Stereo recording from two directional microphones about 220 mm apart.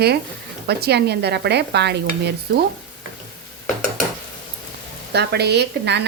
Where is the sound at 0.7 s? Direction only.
50° right (ahead or behind).